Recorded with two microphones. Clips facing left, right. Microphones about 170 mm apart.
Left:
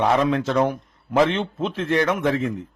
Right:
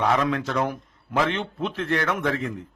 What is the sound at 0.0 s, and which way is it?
Speech, 25° left (ahead or behind).